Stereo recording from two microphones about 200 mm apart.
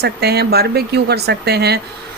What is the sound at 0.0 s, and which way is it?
A woman's voice, 55° right (ahead or behind).